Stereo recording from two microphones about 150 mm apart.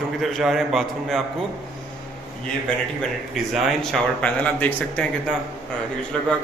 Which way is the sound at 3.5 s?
Centre (ahead or behind).